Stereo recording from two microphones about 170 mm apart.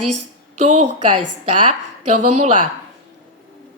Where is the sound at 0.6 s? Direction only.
40° right (ahead or behind).